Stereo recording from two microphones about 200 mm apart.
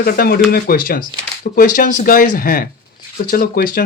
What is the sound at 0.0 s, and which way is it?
Speech, 50° left (ahead or behind).